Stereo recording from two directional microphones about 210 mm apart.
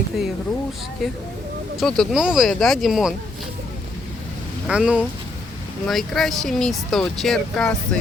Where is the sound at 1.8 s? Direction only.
Centre (ahead or behind).